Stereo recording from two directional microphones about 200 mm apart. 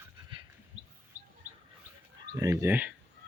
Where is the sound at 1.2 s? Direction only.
40° right (ahead or behind).